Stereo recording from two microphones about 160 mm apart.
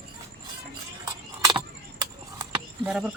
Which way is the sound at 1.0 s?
25° right (ahead or behind).